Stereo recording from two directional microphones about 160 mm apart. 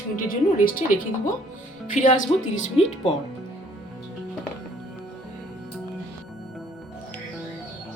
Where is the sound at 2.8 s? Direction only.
40° left (ahead or behind).